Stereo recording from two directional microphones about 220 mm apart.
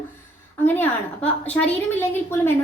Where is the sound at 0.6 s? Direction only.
10° left (ahead or behind).